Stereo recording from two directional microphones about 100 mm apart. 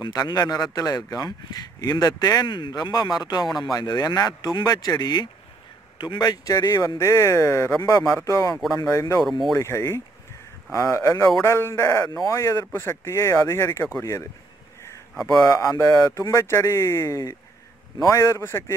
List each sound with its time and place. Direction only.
0.0 s speech: 40° left (ahead or behind)
2.4 s speech: 50° left (ahead or behind); by 18.8 s 25° left (ahead or behind)